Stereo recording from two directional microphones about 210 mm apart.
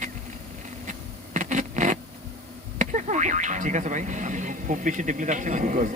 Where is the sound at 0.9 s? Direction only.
35° right (ahead or behind).